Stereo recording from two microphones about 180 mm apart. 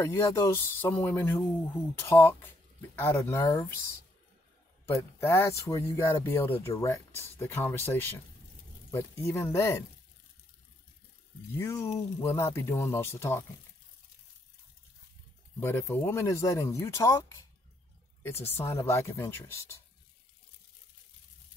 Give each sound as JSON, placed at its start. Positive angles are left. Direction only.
{"t": 0.0, "sound": "speech", "side_deg": 15}
{"t": 4.8, "sound": "speech", "side_deg": 15}
{"t": 11.5, "sound": "speech", "side_deg": 15}
{"t": 15.6, "sound": "speech", "side_deg": 15}